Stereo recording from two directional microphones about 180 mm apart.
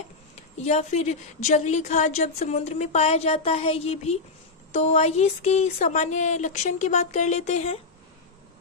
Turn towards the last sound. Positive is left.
turn(degrees=40)  # may be behind; listen again after turning